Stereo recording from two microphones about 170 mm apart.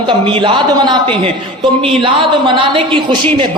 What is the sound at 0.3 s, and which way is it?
A man's voice, 30° right (ahead or behind).